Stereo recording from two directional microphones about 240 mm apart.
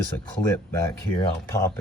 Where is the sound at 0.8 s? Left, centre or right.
Centre.